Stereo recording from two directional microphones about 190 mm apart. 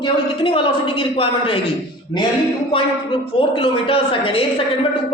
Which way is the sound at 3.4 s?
25° left (ahead or behind).